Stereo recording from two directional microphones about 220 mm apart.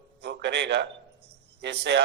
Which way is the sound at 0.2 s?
50° right (ahead or behind).